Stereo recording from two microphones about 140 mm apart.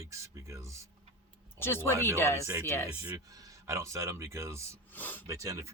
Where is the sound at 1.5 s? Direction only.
15° left (ahead or behind).